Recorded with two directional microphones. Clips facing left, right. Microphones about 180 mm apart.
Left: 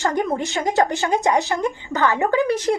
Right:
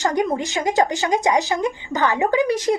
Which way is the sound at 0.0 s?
15° right (ahead or behind).